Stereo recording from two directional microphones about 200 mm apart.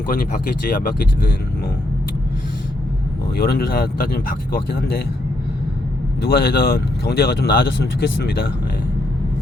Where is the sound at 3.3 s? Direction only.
50° left (ahead or behind).